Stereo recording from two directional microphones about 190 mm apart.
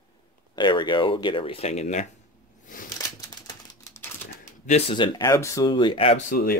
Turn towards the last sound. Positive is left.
turn(degrees=45)  # may be behind; listen again after turning